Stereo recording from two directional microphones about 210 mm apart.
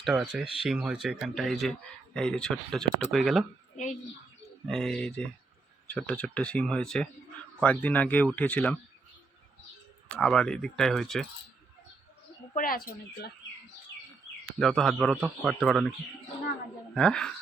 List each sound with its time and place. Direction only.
0.0 s speech: 5° right (ahead or behind)
4.6 s speech: 5° left (ahead or behind)
10.2 s speech: 5° left (ahead or behind)
12.5 s speech: 45° left (ahead or behind)
14.6 s speech: centre (ahead or behind)
16.9 s speech: 5° left (ahead or behind)